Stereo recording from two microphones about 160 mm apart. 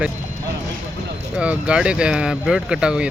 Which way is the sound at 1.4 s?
5° right (ahead or behind).